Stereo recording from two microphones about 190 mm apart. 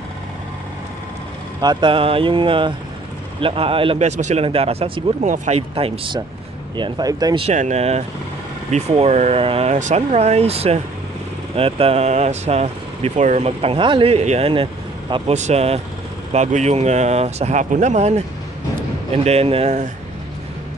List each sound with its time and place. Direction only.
1.6 s speech: 25° right (ahead or behind)
5.2 s speech: 40° right (ahead or behind)
5.6 s speech: 30° right (ahead or behind)
7.4 s speech: 35° right (ahead or behind)
19.2 s speech: 30° right (ahead or behind)